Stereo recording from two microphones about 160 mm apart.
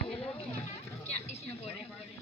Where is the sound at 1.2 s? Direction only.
40° left (ahead or behind).